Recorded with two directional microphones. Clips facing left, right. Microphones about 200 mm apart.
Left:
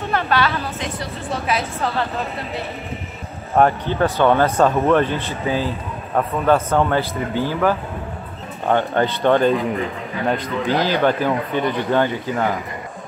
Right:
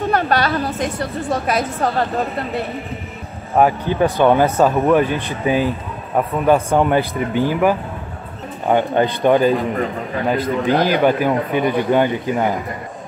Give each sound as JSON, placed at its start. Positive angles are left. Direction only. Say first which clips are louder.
{"t": 0.1, "sound": "a woman's voice", "louder": "right 1 dB", "side_deg": -45}
{"t": 3.5, "sound": "a man's voice", "louder": "right 1 dB", "side_deg": -10}